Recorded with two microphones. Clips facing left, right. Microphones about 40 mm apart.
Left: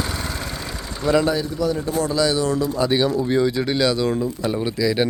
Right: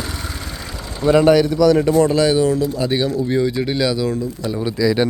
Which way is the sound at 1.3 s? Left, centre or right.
Right.